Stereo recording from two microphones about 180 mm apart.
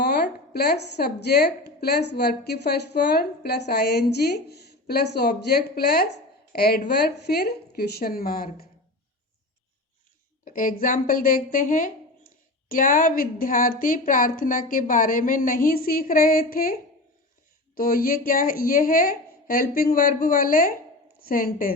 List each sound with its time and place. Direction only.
0.0 s a woman's voice: 60° left (ahead or behind)
10.4 s a woman's voice: 50° left (ahead or behind)
17.7 s a woman's voice: 50° left (ahead or behind)